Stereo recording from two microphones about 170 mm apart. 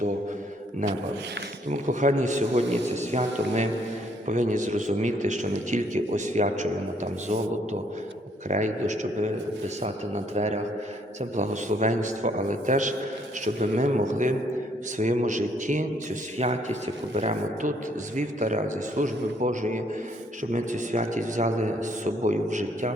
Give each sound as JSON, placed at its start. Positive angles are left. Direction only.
{"t": 1.7, "sound": "a man's voice", "side_deg": -45}
{"t": 10.3, "sound": "a man's voice", "side_deg": -40}